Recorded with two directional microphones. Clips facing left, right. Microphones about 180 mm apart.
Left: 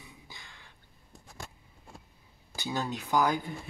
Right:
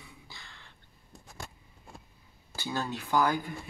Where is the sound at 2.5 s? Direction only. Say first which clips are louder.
Left 1 dB; 15° left (ahead or behind).